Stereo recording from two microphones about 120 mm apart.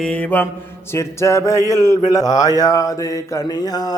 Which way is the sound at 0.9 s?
25° left (ahead or behind).